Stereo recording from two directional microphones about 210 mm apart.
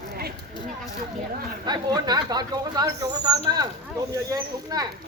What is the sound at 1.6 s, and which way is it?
Speech, 20° right (ahead or behind).